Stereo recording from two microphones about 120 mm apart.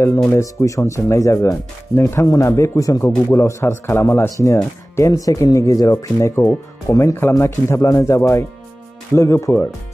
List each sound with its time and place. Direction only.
0.3 s speech: 25° left (ahead or behind)